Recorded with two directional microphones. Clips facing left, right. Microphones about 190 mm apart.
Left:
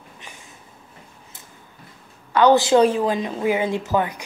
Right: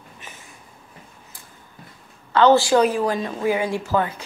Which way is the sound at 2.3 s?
15° left (ahead or behind).